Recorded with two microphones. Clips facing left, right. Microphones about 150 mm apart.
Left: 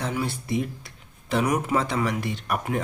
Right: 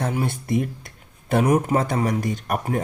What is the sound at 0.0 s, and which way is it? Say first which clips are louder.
Speech: right 3 dB; 50° right (ahead or behind).